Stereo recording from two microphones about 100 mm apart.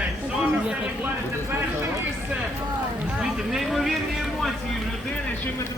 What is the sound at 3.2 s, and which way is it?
Speech, 5° right (ahead or behind).